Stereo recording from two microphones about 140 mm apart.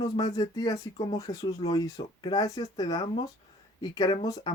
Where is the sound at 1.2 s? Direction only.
25° left (ahead or behind).